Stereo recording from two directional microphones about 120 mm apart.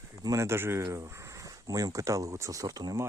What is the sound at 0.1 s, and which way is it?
Speech, 25° right (ahead or behind).